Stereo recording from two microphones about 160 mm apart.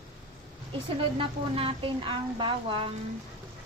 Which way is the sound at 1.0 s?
35° right (ahead or behind).